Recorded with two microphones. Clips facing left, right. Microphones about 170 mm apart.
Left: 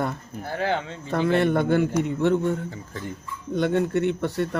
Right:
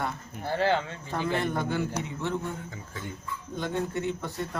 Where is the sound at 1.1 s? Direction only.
70° left (ahead or behind).